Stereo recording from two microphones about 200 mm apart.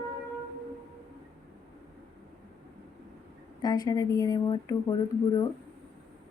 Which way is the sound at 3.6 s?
20° left (ahead or behind).